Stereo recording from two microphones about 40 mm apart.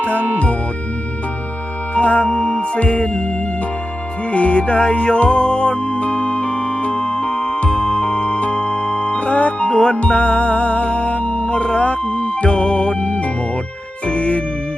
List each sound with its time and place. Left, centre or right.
2.0 s music: left
4.3 s music: left